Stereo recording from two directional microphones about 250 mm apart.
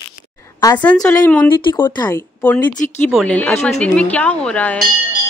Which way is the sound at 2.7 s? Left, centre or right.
Left.